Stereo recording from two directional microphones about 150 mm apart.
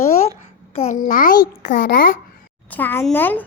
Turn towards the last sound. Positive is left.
turn(degrees=10)  # may be behind; listen again after turning